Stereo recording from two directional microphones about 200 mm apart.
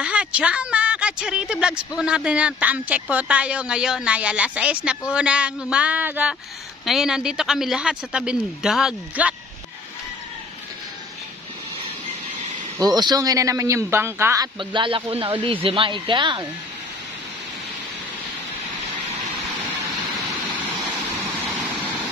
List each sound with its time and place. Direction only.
0.0 s a woman's voice: 5° right (ahead or behind)
12.7 s speech: 20° right (ahead or behind)
21.5 s vehicle: centre (ahead or behind)